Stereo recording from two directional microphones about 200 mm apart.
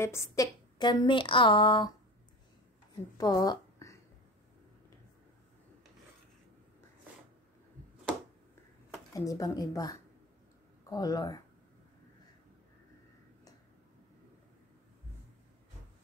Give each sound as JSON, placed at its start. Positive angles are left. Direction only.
{"t": 0.0, "sound": "a woman's voice", "side_deg": 15}
{"t": 3.2, "sound": "a sound", "side_deg": 20}
{"t": 9.1, "sound": "a woman's voice", "side_deg": 15}